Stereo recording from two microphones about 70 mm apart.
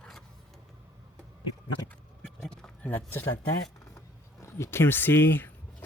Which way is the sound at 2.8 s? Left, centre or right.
Left.